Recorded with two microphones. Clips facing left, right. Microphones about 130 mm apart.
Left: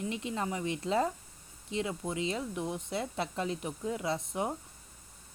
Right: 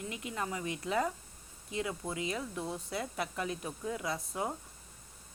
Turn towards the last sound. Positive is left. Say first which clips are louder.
# left 3 dB
turn(degrees=20)  # may be behind; listen again after turning